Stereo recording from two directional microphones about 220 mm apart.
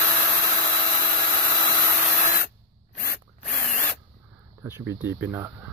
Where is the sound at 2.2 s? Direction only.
40° left (ahead or behind).